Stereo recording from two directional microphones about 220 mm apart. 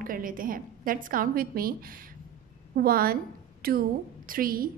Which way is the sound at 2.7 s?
40° right (ahead or behind).